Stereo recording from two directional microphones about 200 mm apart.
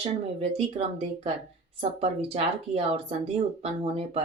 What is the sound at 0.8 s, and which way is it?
Speech, 30° right (ahead or behind).